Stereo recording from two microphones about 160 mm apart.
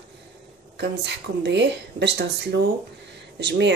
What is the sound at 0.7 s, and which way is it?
Speech, 90° right.